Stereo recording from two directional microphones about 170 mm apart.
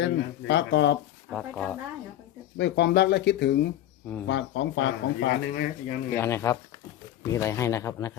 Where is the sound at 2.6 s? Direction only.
85° left.